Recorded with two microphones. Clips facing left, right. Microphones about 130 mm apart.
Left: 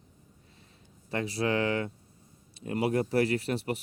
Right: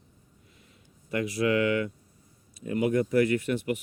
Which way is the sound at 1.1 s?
30° left (ahead or behind).